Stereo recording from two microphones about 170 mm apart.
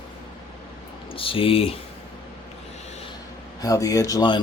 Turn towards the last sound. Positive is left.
turn(degrees=25)  # may be behind; listen again after turning